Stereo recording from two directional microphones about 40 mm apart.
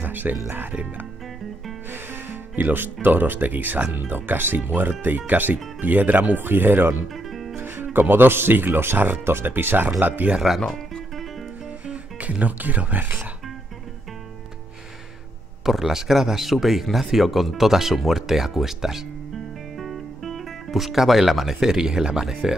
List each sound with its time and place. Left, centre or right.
0.0 s speech: right
2.5 s speech: right
7.5 s music: right
8.1 s speech: right
9.2 s speech: right
10.4 s speech: centre
11.9 s speech: right
15.6 s speech: centre